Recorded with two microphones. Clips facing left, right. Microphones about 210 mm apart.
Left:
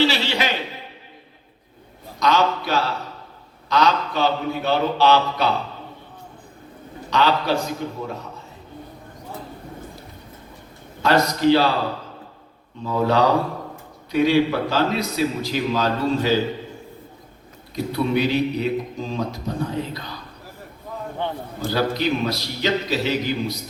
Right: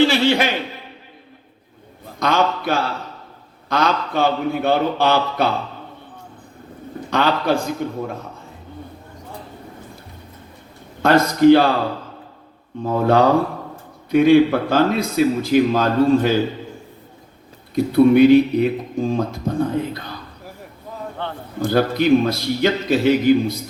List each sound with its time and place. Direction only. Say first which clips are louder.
0.1 s a man's voice: right 7 dB; 50° right (ahead or behind)
2.1 s a man's voice: right 1 dB; 50° right (ahead or behind)
7.1 s a man's voice: right 2 dB; 50° right (ahead or behind)
11.0 s a man's voice: right 5 dB; 50° right (ahead or behind)
12.8 s a man's voice: right 3 dB; 50° right (ahead or behind)
17.9 s a man's voice: right 11 dB; 50° right (ahead or behind)
21.2 s a man's voice: left 3 dB; 15° left (ahead or behind)
21.7 s a man's voice: right 7 dB; 50° right (ahead or behind)